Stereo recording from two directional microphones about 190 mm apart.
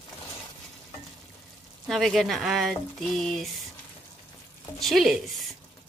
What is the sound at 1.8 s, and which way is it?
Speech, centre (ahead or behind).